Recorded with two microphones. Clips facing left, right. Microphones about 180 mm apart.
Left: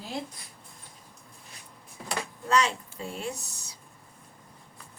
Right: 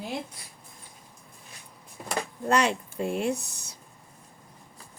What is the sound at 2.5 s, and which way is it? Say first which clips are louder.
Speech: right 2 dB; 55° right (ahead or behind).